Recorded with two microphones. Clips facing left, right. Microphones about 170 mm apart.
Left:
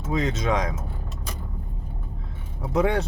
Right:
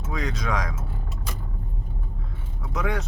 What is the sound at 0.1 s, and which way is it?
Speech, 25° left (ahead or behind).